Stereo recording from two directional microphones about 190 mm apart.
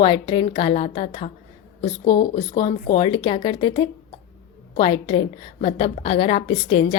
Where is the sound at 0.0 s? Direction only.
25° left (ahead or behind).